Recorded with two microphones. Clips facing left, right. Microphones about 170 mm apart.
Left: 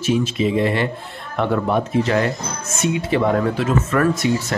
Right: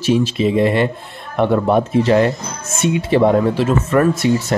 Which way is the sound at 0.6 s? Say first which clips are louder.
Right 4 dB; 20° right (ahead or behind).